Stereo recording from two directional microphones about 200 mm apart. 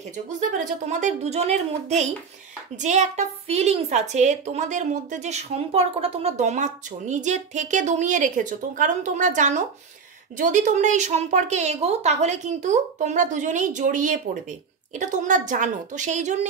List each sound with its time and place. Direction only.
0.5 s a woman's voice: 35° right (ahead or behind)